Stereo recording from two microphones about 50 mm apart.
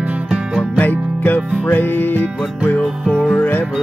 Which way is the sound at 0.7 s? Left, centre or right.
Left.